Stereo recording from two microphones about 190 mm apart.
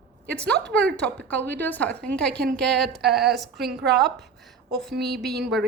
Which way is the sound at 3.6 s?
60° right (ahead or behind).